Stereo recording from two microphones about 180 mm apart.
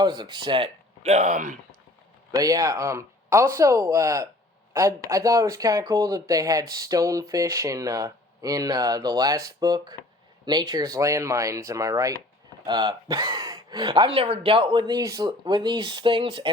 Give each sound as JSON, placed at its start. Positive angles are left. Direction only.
{"t": 0.0, "sound": "speech", "side_deg": -25}
{"t": 2.3, "sound": "speech", "side_deg": -20}